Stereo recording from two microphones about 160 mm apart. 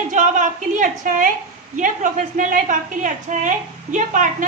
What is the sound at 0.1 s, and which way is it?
A woman's voice, 50° right (ahead or behind).